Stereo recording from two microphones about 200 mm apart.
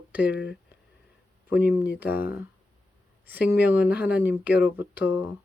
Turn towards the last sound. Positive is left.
turn(degrees=-10)  # may be behind; listen again after turning